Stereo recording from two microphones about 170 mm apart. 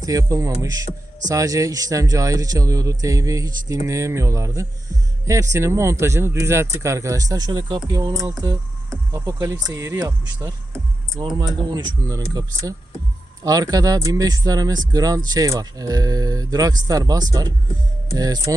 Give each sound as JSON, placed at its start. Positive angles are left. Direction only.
{"t": 0.0, "sound": "speech", "side_deg": -20}